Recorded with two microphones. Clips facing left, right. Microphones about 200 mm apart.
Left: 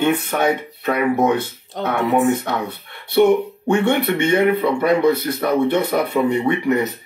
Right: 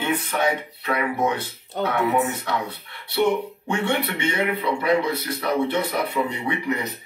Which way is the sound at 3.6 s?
45° left (ahead or behind).